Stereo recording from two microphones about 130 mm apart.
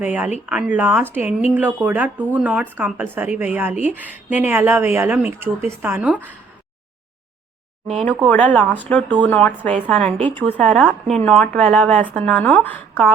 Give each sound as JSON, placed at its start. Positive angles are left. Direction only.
{"t": 0.0, "sound": "speech", "side_deg": -15}
{"t": 8.3, "sound": "a woman's voice", "side_deg": 10}